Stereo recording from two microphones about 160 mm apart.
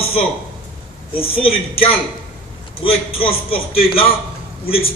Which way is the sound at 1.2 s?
35° left (ahead or behind).